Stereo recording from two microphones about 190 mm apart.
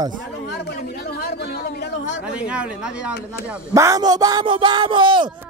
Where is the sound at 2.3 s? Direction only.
5° right (ahead or behind).